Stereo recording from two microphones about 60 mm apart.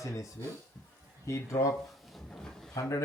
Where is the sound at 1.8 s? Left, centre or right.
Centre.